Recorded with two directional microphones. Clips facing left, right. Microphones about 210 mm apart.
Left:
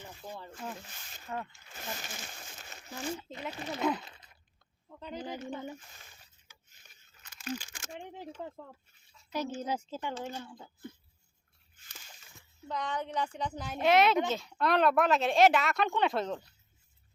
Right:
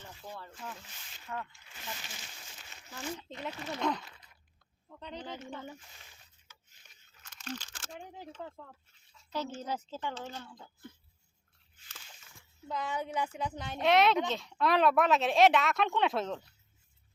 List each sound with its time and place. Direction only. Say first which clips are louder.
0.0 s a sound: left 2 dB; 15° left (ahead or behind)
0.9 s a sound: left 3 dB; 45° left (ahead or behind)
1.4 s slosh: left 2 dB; 40° left (ahead or behind)
3.2 s speech: left 1 dB; centre (ahead or behind)
7.2 s speech: left 4 dB; 5° left (ahead or behind)
12.6 s speech: even; 5° right (ahead or behind)